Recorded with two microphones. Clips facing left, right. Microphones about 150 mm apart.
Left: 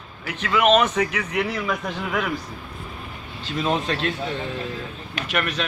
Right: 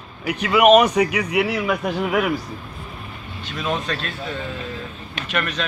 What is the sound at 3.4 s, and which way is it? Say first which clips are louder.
Speech: left 2 dB; 25° left (ahead or behind).